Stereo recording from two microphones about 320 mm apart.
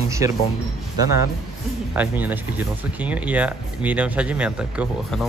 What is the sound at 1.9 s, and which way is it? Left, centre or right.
A man's voice, centre.